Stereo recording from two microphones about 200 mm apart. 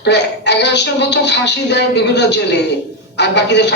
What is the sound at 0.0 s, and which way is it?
A woman's voice, 60° left (ahead or behind).